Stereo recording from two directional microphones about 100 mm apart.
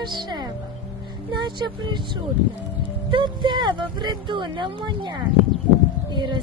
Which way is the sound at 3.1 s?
50° right (ahead or behind).